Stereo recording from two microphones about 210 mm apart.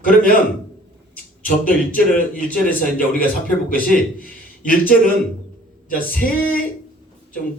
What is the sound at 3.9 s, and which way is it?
A man's voice, 40° left (ahead or behind).